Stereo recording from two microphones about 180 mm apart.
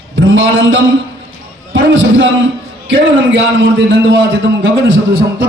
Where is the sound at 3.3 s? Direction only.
90° right.